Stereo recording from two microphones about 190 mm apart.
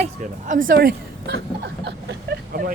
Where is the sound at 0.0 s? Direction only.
45° right (ahead or behind).